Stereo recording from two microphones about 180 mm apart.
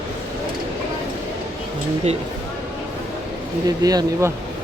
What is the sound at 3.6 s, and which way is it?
Speech, 20° right (ahead or behind).